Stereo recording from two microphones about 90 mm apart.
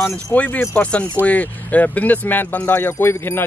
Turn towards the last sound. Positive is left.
turn(degrees=25)  # may be behind; listen again after turning